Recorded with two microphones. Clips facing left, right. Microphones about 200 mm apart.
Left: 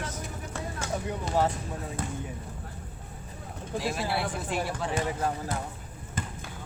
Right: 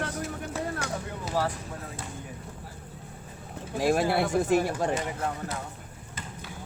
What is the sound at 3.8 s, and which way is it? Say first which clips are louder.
Speech: right 6 dB; 50° right (ahead or behind).